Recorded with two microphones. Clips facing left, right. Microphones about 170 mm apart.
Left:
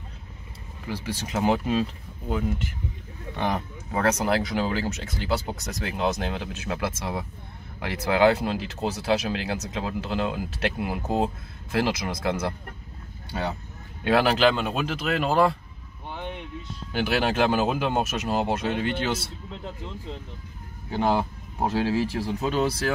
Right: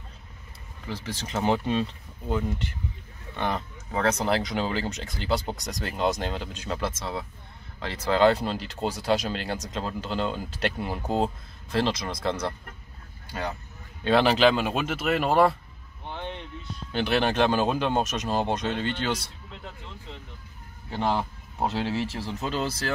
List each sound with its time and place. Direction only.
0.8 s speech: 10° left (ahead or behind)
14.0 s speech: 5° left (ahead or behind)
16.1 s a sound: 10° left (ahead or behind)
16.9 s speech: 5° left (ahead or behind)
20.9 s speech: 15° left (ahead or behind)